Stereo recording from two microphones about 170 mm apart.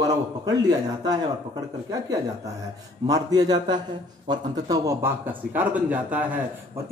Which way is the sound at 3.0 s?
20° right (ahead or behind).